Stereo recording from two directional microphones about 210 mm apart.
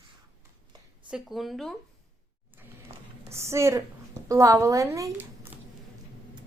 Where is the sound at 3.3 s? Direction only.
15° right (ahead or behind).